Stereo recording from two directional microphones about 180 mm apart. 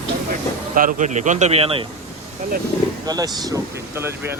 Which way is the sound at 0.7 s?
45° right (ahead or behind).